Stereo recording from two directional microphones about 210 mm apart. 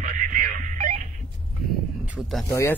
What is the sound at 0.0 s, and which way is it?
Music, 40° right (ahead or behind).